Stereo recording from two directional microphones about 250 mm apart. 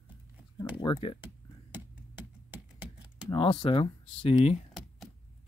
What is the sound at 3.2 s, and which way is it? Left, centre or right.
Speech, left.